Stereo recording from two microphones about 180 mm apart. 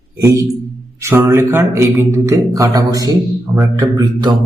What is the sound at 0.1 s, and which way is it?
A man's voice, 15° right (ahead or behind).